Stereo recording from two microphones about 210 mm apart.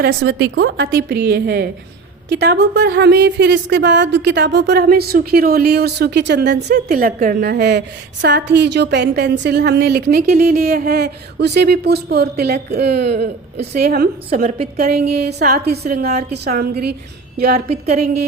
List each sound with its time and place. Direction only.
0.0 s a woman's voice: 50° right (ahead or behind)